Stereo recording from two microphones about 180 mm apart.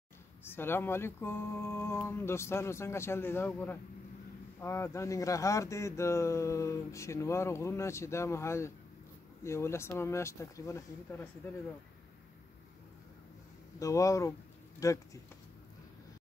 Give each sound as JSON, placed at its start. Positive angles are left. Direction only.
{"t": 0.4, "sound": "speech", "side_deg": 10}
{"t": 13.7, "sound": "speech", "side_deg": 15}